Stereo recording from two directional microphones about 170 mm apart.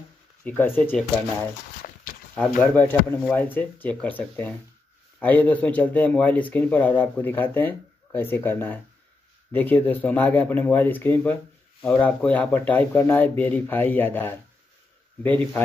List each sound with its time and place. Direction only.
0.4 s speech: 10° left (ahead or behind)
1.8 s walk: 50° left (ahead or behind)
2.3 s speech: 10° left (ahead or behind)